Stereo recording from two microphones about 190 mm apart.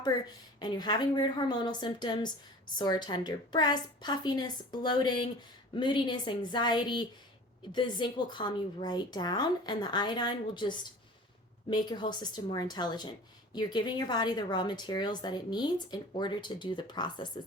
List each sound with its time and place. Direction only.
0.0 s speech: 20° left (ahead or behind)